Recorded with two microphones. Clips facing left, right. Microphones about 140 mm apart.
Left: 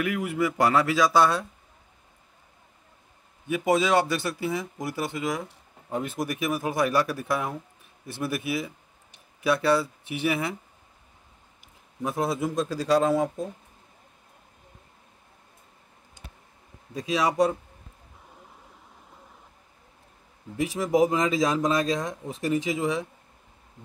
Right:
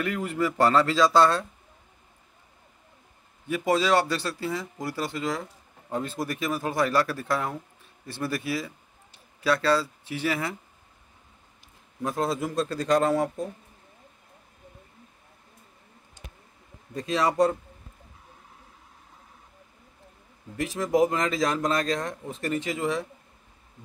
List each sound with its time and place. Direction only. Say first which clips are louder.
0.0 s speech: left 1 dB; 10° left (ahead or behind)
3.4 s speech: left 1 dB; 15° left (ahead or behind)
12.0 s speech: left 1 dB; 10° left (ahead or behind)
16.9 s a man's voice: even; 5° left (ahead or behind)
20.5 s speech: left 1 dB; 10° left (ahead or behind)